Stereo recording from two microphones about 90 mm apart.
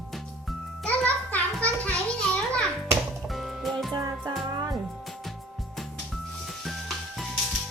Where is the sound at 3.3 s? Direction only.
Centre (ahead or behind).